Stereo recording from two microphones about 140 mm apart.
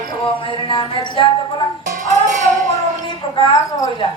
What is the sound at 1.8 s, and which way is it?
Music, 65° right (ahead or behind).